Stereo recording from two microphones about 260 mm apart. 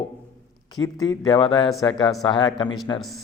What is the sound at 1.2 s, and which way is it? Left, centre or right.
Speech, centre.